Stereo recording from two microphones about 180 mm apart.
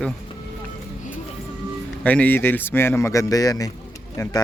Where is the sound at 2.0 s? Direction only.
10° left (ahead or behind).